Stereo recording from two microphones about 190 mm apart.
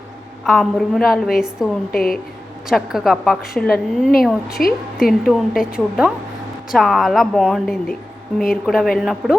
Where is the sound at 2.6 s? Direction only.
Centre (ahead or behind).